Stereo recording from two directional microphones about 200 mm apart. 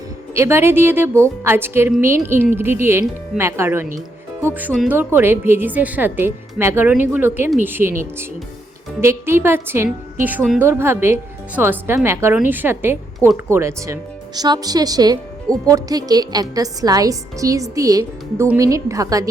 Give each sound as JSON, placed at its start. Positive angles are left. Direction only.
{"t": 0.3, "sound": "a woman's voice", "side_deg": -15}